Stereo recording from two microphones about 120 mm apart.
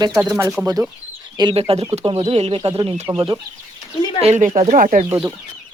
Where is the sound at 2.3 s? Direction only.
55° right (ahead or behind).